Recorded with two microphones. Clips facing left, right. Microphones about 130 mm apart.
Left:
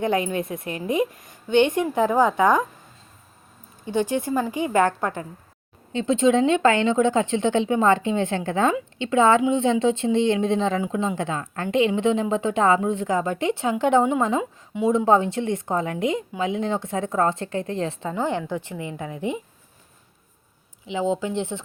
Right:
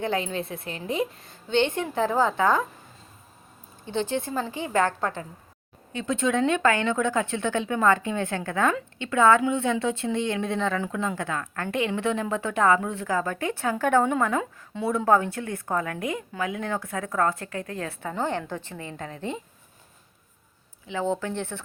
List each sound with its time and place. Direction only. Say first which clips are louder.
0.0 s a woman's voice: left 4 dB; 15° left (ahead or behind)
3.8 s a woman's voice: left 4 dB; 15° left (ahead or behind)
20.8 s a woman's voice: left 3 dB; 15° left (ahead or behind)